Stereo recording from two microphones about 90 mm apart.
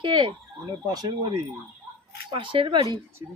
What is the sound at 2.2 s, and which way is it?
Speech, 70° right (ahead or behind).